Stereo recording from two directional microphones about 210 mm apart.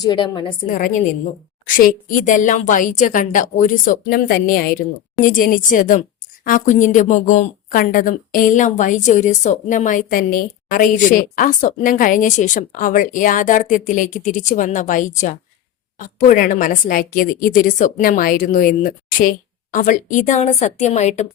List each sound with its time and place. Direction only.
0.0 s a woman's voice: 20° left (ahead or behind)
0.7 s a woman's voice: 40° left (ahead or behind)